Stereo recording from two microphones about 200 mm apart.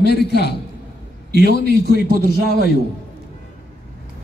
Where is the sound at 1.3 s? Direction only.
60° right (ahead or behind).